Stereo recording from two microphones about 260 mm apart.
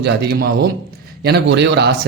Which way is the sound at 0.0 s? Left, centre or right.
Right.